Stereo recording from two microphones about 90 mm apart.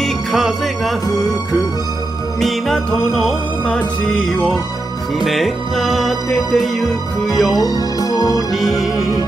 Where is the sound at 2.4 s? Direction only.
Centre (ahead or behind).